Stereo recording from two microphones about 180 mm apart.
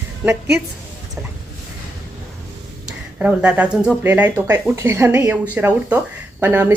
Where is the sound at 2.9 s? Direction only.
5° right (ahead or behind).